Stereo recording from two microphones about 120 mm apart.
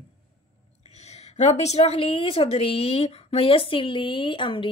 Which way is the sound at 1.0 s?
70° left (ahead or behind).